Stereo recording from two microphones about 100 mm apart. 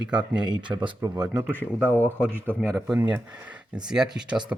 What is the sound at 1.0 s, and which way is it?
Speech, 35° right (ahead or behind).